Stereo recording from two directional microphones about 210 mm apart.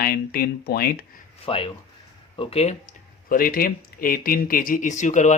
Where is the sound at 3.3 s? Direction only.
45° left (ahead or behind).